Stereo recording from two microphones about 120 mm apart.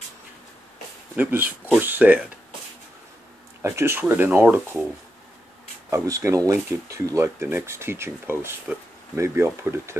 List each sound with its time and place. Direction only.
1.1 s speech: 15° right (ahead or behind)
3.6 s speech: 20° right (ahead or behind)
5.9 s speech: 25° right (ahead or behind)